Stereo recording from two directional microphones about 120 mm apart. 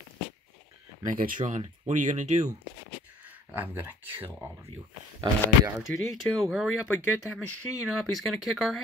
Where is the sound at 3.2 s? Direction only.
15° right (ahead or behind).